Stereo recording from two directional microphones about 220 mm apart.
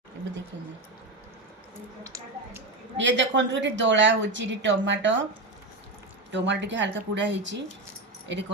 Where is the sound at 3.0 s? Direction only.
55° right (ahead or behind).